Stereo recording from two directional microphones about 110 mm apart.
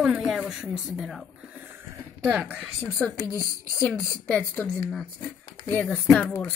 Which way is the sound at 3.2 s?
25° left (ahead or behind).